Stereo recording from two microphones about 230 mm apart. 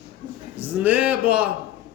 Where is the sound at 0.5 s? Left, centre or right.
Centre.